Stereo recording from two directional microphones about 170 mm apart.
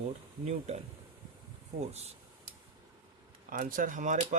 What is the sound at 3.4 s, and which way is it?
Speech, 55° right (ahead or behind).